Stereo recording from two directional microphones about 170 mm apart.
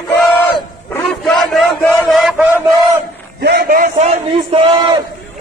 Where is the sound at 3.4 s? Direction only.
65° right (ahead or behind).